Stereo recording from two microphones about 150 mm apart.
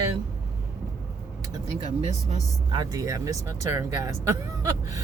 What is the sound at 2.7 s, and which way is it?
Speech, 25° right (ahead or behind).